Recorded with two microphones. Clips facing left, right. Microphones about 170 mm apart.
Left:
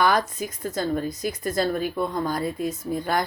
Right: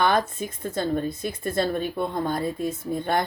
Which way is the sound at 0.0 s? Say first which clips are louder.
Even; 25° right (ahead or behind).